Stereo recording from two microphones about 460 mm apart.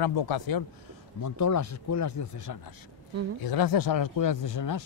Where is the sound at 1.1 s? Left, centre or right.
Left.